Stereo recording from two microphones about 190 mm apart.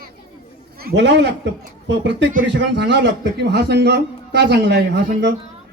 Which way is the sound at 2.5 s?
65° right (ahead or behind).